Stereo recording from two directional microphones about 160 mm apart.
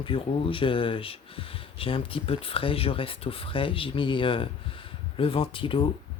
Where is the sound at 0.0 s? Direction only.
35° left (ahead or behind).